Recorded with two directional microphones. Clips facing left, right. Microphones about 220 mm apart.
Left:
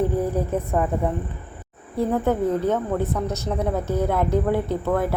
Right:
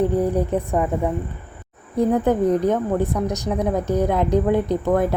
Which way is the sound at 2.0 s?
15° right (ahead or behind).